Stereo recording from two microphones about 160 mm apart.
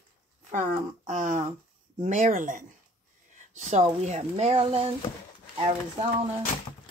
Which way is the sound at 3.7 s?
45° right (ahead or behind).